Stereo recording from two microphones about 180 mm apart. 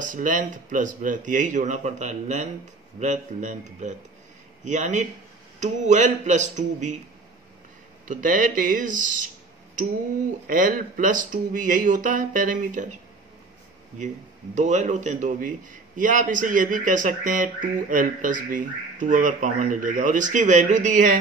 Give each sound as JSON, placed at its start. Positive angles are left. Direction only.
{"t": 0.0, "sound": "a man's voice", "side_deg": -45}
{"t": 8.1, "sound": "a man's voice", "side_deg": -45}
{"t": 10.4, "sound": "a man's voice", "side_deg": -45}
{"t": 13.9, "sound": "a man's voice", "side_deg": -40}